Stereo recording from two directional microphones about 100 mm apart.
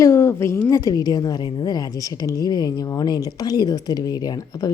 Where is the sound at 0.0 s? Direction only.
25° left (ahead or behind).